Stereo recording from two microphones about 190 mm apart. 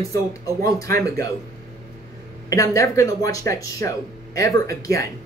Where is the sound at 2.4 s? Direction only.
15° left (ahead or behind).